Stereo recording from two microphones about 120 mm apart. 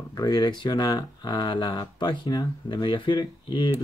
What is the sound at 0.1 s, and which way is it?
Speech, 35° left (ahead or behind).